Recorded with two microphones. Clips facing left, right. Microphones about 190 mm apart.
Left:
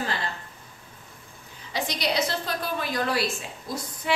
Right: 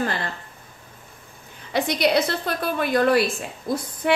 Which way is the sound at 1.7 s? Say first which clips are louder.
Right 8 dB; 60° right (ahead or behind).